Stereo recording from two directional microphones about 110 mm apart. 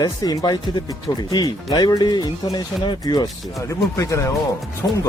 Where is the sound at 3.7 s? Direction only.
30° left (ahead or behind).